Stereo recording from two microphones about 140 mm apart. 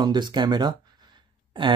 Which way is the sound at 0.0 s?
30° right (ahead or behind).